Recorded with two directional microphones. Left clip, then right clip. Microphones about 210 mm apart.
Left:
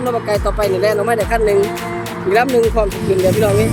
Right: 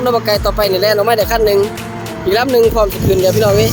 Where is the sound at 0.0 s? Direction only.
15° right (ahead or behind).